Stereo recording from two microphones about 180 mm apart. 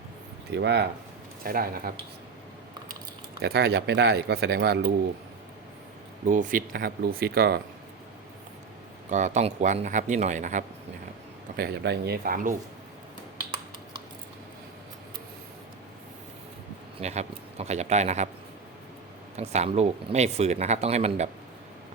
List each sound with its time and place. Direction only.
0.5 s speech: 70° right (ahead or behind)
1.5 s speech: 55° right (ahead or behind)
3.4 s speech: 70° right (ahead or behind)
6.2 s speech: 45° right (ahead or behind); by 7.6 s 60° right (ahead or behind)
9.0 s speech: 40° right (ahead or behind)
11.5 s speech: 65° right (ahead or behind)
17.0 s speech: 40° right (ahead or behind)
19.4 s speech: 35° right (ahead or behind)